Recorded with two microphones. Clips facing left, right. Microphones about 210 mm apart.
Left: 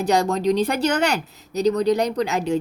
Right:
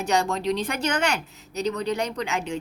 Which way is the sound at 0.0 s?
35° left (ahead or behind).